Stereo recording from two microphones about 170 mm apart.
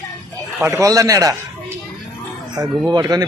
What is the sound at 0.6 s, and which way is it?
Speech, 15° right (ahead or behind).